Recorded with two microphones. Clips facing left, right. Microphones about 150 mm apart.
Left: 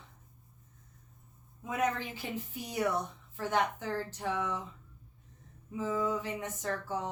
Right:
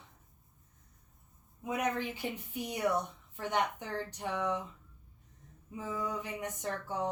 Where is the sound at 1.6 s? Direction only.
15° right (ahead or behind).